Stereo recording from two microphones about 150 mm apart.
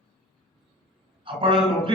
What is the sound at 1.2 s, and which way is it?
Speech, 35° right (ahead or behind).